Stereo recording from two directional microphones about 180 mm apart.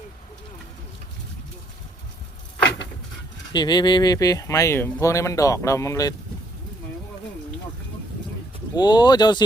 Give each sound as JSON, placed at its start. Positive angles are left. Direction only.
{"t": 3.5, "sound": "speech", "side_deg": 25}
{"t": 8.7, "sound": "speech", "side_deg": 25}